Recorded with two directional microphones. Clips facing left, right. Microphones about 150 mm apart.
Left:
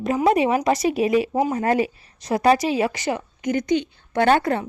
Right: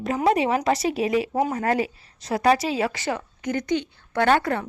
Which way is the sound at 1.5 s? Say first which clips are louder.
Left 3 dB; 25° left (ahead or behind).